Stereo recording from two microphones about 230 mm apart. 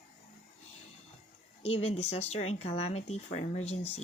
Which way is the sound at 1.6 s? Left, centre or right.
Left.